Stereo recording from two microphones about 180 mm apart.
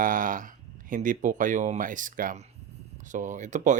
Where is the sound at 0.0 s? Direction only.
50° right (ahead or behind).